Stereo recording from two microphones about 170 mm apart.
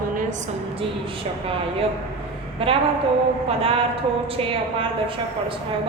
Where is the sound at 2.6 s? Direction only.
30° right (ahead or behind).